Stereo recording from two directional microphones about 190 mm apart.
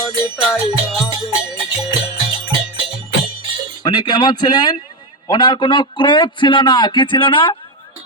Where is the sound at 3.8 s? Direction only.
25° left (ahead or behind).